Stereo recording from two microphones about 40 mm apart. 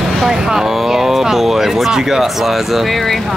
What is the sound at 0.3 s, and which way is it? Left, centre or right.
Speech, centre.